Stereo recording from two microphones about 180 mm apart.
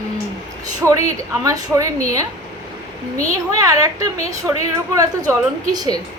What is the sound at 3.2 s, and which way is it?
A woman's voice, 20° right (ahead or behind).